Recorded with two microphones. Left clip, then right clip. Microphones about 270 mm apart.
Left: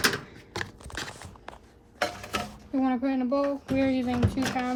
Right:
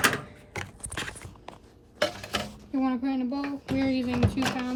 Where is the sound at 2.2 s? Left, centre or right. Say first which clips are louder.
Even; centre.